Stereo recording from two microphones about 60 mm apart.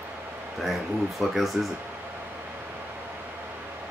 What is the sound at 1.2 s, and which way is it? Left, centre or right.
Speech, centre.